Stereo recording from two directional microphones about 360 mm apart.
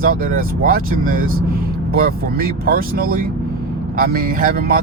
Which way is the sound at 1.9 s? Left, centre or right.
Right.